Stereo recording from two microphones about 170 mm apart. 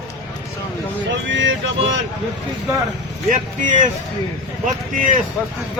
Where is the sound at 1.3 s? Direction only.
90° right.